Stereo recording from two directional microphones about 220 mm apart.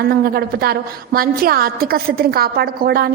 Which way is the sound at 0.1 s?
45° right (ahead or behind).